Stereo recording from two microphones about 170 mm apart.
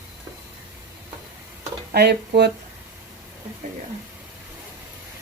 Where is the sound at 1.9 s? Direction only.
75° right (ahead or behind).